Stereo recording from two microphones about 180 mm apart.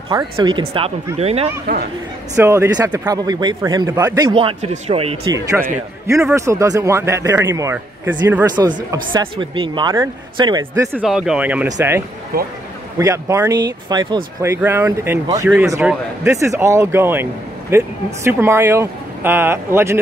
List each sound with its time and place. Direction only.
0.1 s speech: 25° right (ahead or behind)
2.3 s speech: 15° right (ahead or behind)
4.3 s speech: 30° right (ahead or behind)
5.3 s speech: 15° right (ahead or behind)
8.5 s speech: 25° right (ahead or behind); by 11.6 s 5° right (ahead or behind)
12.3 s a man's voice: 55° right (ahead or behind)
13.0 s speech: 15° right (ahead or behind)